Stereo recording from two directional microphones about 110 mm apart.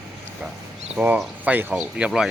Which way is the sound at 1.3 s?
15° right (ahead or behind).